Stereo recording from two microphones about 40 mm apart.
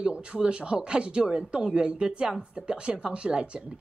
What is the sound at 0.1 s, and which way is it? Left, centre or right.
A woman's voice, right.